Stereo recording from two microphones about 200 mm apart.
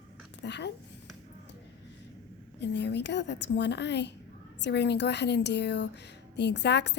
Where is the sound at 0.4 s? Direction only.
60° left (ahead or behind).